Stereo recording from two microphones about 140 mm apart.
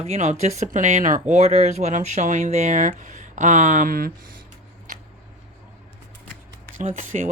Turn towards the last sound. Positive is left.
turn(degrees=-65)  # may be behind; listen again after turning